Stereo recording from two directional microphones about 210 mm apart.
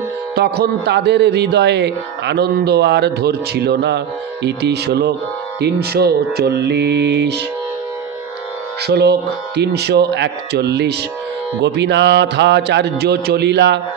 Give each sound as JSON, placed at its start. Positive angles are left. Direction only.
{"t": 0.4, "sound": "a man's voice", "side_deg": -50}
{"t": 8.8, "sound": "a man's voice", "side_deg": -50}